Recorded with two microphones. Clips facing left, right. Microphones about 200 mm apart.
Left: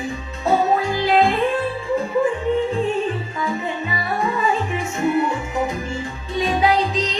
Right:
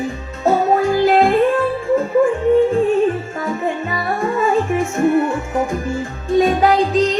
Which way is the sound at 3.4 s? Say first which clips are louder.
Right 3 dB; 50° right (ahead or behind).